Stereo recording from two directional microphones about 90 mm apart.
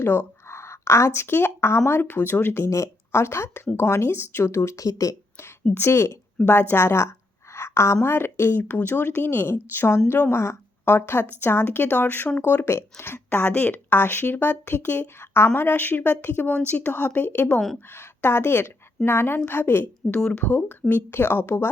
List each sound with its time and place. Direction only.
0.0 s speech: 25° left (ahead or behind)
2.6 s a woman's voice: 35° left (ahead or behind)
5.7 s a woman's voice: 30° left (ahead or behind)